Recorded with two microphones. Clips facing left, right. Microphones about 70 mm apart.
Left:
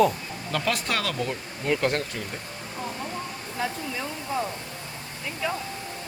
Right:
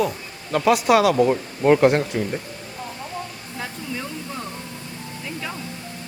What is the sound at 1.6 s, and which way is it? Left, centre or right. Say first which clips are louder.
Speech: right 10 dB; right.